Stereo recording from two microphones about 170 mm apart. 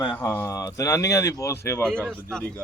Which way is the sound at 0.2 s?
10° left (ahead or behind).